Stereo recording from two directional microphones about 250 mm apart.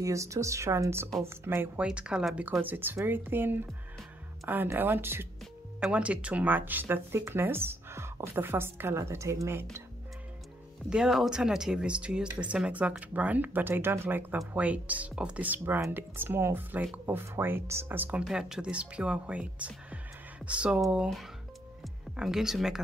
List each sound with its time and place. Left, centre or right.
0.0 s speech: centre
10.9 s speech: centre